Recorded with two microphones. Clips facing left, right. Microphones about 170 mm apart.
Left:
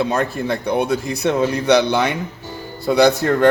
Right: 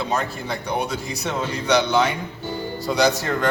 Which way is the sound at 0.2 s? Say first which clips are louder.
Left 7 dB; 55° left (ahead or behind).